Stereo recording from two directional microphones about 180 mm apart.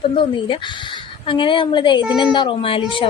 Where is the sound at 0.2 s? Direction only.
25° left (ahead or behind).